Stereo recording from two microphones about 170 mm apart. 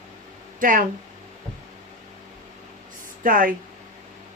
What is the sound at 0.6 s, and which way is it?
Speech, 55° right (ahead or behind).